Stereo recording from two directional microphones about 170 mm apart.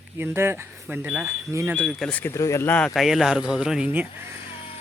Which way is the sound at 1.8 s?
Centre (ahead or behind).